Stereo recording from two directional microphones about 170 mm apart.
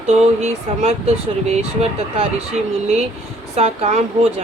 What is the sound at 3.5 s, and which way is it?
Speech, 35° right (ahead or behind).